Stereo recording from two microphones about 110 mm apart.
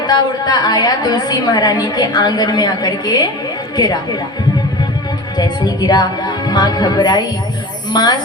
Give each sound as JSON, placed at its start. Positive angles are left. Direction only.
{"t": 0.0, "sound": "a woman's voice", "side_deg": 40}
{"t": 5.4, "sound": "a woman's voice", "side_deg": 40}